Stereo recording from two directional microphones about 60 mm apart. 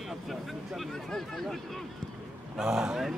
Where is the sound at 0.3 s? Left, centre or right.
Centre.